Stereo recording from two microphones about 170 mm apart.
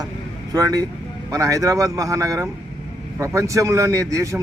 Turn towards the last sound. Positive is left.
turn(degrees=-20)  # may be behind; listen again after turning